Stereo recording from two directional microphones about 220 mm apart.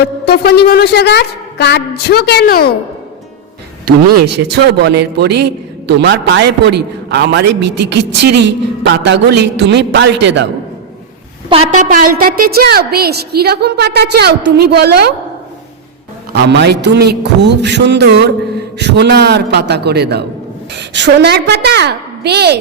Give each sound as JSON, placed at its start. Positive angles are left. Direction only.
{"t": 0.0, "sound": "a woman's voice", "side_deg": 45}
{"t": 4.1, "sound": "a man's voice", "side_deg": -50}
{"t": 11.4, "sound": "a man's voice", "side_deg": -25}
{"t": 16.3, "sound": "a man's voice", "side_deg": -50}